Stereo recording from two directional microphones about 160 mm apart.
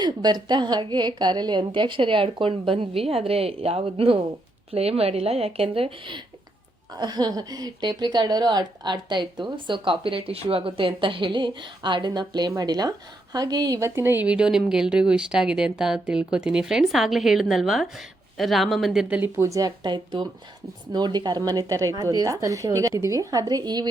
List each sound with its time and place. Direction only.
0.0 s a woman's voice: 25° right (ahead or behind)
7.0 s a woman's voice: 25° right (ahead or behind)